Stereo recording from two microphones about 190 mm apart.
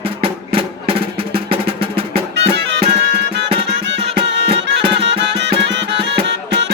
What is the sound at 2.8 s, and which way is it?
Music, 30° right (ahead or behind).